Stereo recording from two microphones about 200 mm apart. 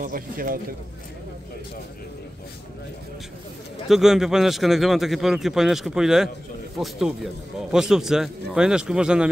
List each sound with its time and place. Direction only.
0.0 s a man's voice: 45° right (ahead or behind)
3.9 s a man's voice: centre (ahead or behind)